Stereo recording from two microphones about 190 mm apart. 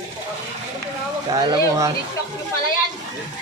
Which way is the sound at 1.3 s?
20° right (ahead or behind).